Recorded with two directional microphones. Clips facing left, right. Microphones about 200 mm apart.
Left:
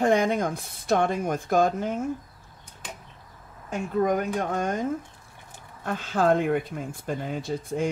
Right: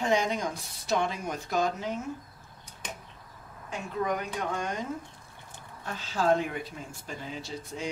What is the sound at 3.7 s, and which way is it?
Speech, 45° left (ahead or behind).